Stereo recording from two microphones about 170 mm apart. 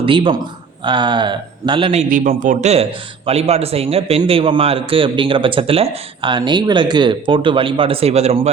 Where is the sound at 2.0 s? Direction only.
50° right (ahead or behind).